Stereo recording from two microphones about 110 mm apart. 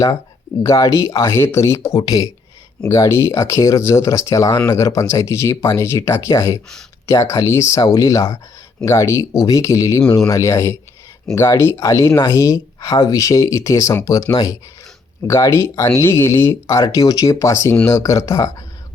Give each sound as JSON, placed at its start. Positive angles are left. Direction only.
{"t": 0.6, "sound": "speech", "side_deg": 30}
{"t": 15.3, "sound": "speech", "side_deg": 25}